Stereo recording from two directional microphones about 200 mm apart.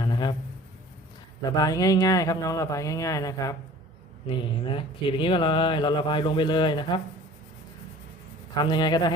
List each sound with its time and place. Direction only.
0.0 s a sound: 25° left (ahead or behind)
1.5 s speech: 20° left (ahead or behind)
8.5 s speech: 20° left (ahead or behind)